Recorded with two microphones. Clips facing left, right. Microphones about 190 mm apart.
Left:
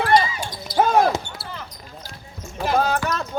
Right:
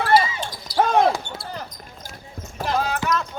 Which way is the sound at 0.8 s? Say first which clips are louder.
Even; centre (ahead or behind).